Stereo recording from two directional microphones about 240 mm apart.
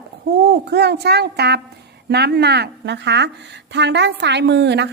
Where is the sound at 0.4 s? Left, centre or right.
Right.